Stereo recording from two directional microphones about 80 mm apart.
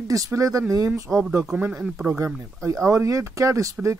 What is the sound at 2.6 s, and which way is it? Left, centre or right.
Speech, right.